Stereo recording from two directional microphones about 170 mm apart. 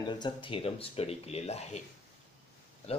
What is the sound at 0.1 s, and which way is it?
Speech, 30° left (ahead or behind).